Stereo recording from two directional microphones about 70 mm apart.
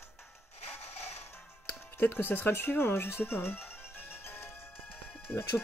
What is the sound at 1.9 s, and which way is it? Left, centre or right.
Speech, left.